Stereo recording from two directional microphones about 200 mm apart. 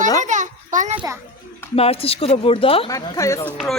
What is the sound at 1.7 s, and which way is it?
Speech, 30° left (ahead or behind).